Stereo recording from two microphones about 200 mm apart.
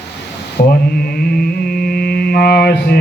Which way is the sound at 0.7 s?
50° left (ahead or behind).